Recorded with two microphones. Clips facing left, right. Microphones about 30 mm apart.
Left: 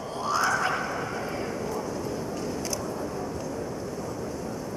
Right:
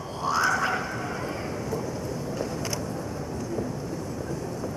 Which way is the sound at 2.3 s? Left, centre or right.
Centre.